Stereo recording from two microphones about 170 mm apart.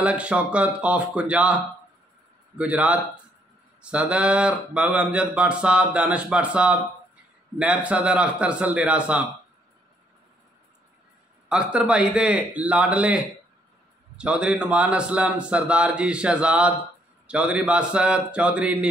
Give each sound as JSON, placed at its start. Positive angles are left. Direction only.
{"t": 0.0, "sound": "speech", "side_deg": -5}
{"t": 11.4, "sound": "speech", "side_deg": -5}